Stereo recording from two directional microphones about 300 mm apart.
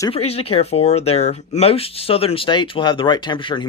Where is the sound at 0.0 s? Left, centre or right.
Centre.